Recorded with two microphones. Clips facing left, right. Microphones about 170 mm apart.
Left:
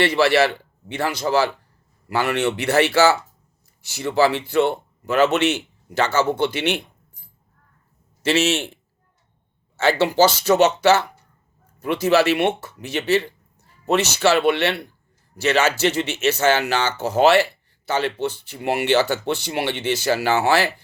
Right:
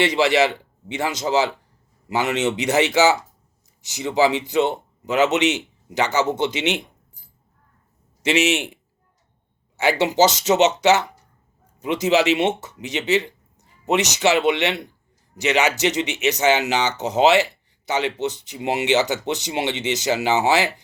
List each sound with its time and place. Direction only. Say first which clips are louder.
0.0 s speech: left 1 dB; 20° right (ahead or behind)
8.2 s speech: even; 15° right (ahead or behind)